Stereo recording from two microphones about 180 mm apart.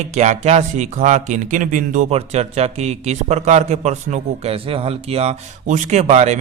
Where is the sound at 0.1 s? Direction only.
40° right (ahead or behind).